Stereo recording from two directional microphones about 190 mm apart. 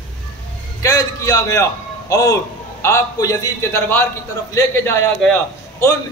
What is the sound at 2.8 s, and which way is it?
A man's voice, 15° left (ahead or behind).